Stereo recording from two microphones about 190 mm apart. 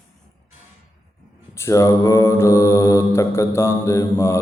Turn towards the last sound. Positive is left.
turn(degrees=15)  # may be behind; listen again after turning